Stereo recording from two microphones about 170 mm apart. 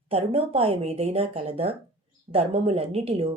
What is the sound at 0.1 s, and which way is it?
Speech, 35° right (ahead or behind).